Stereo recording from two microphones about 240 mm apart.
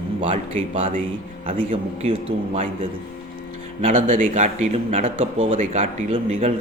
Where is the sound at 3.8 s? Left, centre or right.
Right.